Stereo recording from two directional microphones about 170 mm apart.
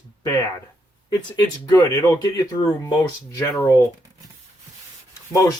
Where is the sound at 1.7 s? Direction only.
20° left (ahead or behind).